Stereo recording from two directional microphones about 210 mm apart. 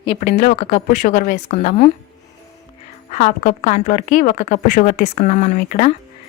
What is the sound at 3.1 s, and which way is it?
A woman's voice, 35° left (ahead or behind).